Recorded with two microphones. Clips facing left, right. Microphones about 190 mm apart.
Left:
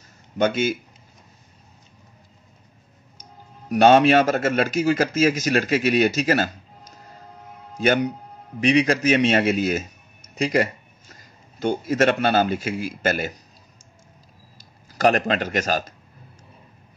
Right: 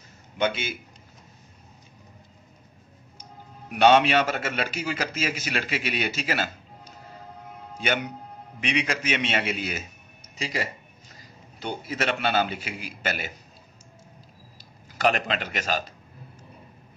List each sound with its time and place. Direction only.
0.4 s speech: 45° left (ahead or behind)
3.2 s a man's voice: 40° left (ahead or behind)
10.3 s a sound: 50° left (ahead or behind)
11.6 s speech: 45° left (ahead or behind)
14.6 s speech: 45° left (ahead or behind)